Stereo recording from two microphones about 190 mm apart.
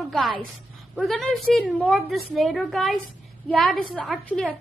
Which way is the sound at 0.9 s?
Centre (ahead or behind).